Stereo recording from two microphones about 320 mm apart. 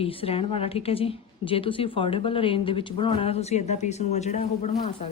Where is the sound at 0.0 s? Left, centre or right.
Centre.